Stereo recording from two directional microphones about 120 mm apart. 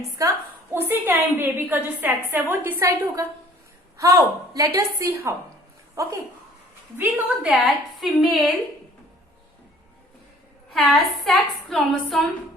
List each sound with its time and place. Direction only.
0.2 s a woman's voice: 25° right (ahead or behind)
7.0 s a woman's voice: 10° right (ahead or behind)
10.8 s a woman's voice: centre (ahead or behind)